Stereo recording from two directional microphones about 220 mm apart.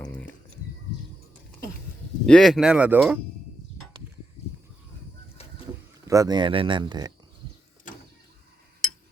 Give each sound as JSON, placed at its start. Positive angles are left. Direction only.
{"t": 2.2, "sound": "speech", "side_deg": 5}
{"t": 6.1, "sound": "speech", "side_deg": -15}